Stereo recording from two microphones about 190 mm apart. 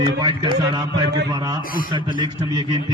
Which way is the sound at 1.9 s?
25° right (ahead or behind).